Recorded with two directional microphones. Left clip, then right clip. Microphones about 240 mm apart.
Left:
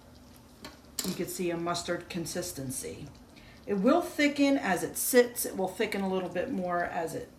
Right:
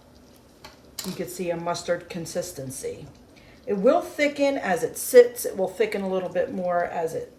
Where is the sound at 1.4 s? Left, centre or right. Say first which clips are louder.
Right 5 dB; left.